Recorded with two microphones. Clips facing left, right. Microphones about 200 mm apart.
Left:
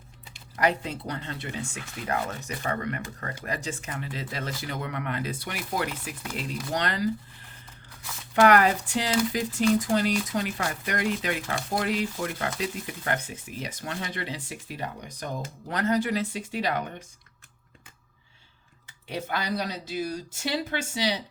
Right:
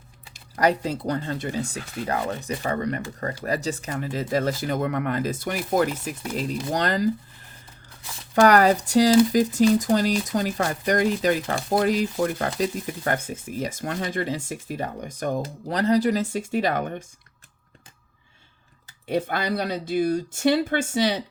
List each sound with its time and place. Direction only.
0.3 s speech: 40° right (ahead or behind)
8.4 s speech: 40° right (ahead or behind)
15.4 s speech: 35° right (ahead or behind)
19.0 s speech: 55° right (ahead or behind)